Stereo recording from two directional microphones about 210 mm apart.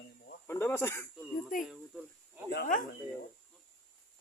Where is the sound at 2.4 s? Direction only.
45° left (ahead or behind).